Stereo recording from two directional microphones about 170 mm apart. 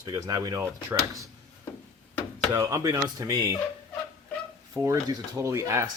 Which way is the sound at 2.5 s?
20° right (ahead or behind).